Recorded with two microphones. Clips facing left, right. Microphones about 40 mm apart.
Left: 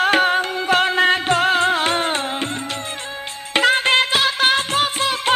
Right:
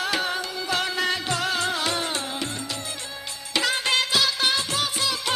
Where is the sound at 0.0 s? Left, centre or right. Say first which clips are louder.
Left 10 dB; left.